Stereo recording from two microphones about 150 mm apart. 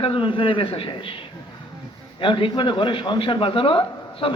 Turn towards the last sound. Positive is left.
turn(degrees=35)  # may be behind; listen again after turning